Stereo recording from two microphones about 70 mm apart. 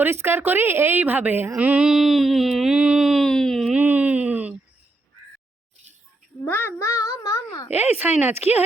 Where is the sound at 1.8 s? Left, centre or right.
Centre.